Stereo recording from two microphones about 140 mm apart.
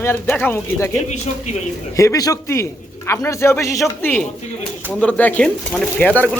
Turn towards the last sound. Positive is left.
turn(degrees=10)  # may be behind; listen again after turning